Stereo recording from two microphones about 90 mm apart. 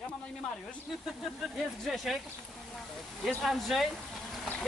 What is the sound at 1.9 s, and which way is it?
Speech, centre (ahead or behind).